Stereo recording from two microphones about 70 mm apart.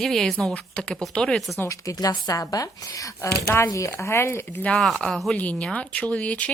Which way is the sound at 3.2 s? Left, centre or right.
Left.